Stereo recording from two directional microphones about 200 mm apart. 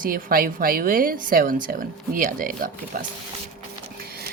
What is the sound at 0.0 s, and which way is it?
A woman's voice, 45° right (ahead or behind).